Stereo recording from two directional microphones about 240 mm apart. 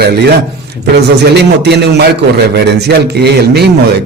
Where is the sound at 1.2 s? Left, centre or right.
Right.